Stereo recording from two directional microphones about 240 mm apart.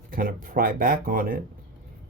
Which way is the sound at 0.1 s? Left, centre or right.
Right.